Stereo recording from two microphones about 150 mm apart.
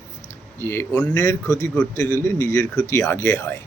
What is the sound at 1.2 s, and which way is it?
A man's voice, 20° left (ahead or behind).